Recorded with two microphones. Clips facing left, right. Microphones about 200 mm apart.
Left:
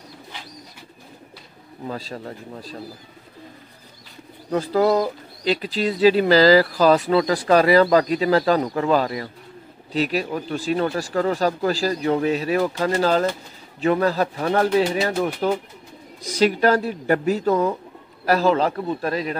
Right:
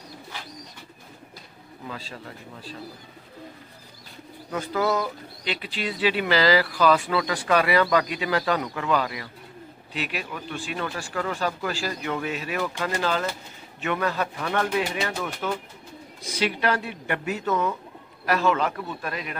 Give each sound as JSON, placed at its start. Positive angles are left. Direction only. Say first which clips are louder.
{"t": 1.9, "sound": "speech", "louder": "left 7 dB", "side_deg": 40}
{"t": 4.5, "sound": "speech", "louder": "left 7 dB", "side_deg": 35}